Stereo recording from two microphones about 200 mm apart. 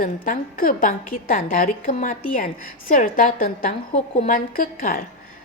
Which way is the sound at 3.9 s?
30° left (ahead or behind).